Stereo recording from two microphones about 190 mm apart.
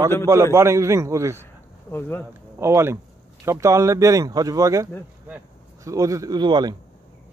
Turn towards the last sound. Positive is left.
turn(degrees=-20)  # may be behind; listen again after turning